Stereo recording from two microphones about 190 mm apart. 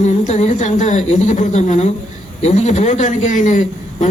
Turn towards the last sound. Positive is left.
turn(degrees=40)  # may be behind; listen again after turning